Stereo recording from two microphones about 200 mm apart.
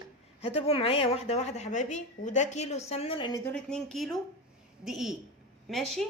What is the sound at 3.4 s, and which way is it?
A woman's voice, 5° left (ahead or behind).